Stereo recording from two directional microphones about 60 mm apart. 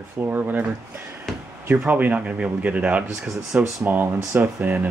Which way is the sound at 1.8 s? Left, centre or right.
Right.